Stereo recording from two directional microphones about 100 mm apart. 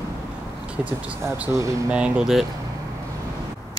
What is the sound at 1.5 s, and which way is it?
Speech, 35° right (ahead or behind).